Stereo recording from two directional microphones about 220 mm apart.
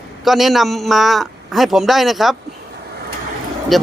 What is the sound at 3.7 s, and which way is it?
Speech, centre (ahead or behind).